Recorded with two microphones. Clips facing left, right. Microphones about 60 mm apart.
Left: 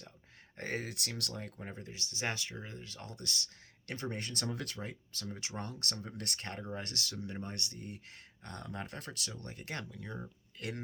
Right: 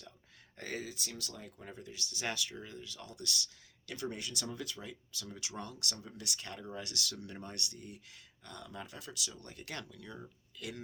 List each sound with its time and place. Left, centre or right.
0.5 s speech: left
0.9 s speech: left
1.5 s speech: left
4.4 s speech: left
5.2 s speech: left
8.4 s speech: left
9.4 s speech: left
10.6 s speech: left